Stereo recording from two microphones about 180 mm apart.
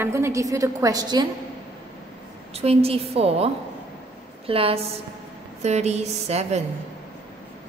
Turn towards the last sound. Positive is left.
turn(degrees=-35)  # may be behind; listen again after turning